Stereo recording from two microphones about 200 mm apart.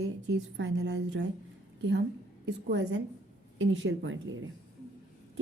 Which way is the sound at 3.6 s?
70° right (ahead or behind).